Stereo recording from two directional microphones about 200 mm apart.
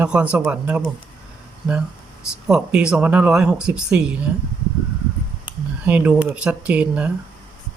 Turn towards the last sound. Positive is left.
turn(degrees=-5)  # may be behind; listen again after turning